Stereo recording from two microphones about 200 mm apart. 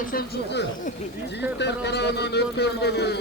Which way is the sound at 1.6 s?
55° left (ahead or behind).